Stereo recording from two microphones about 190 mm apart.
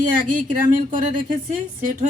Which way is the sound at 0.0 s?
45° right (ahead or behind).